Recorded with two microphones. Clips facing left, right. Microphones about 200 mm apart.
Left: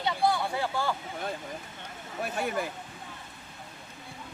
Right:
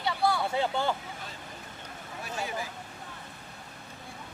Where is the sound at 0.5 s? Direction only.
25° right (ahead or behind).